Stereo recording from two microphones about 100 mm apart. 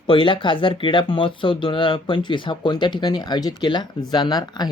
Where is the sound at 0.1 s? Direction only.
55° left (ahead or behind).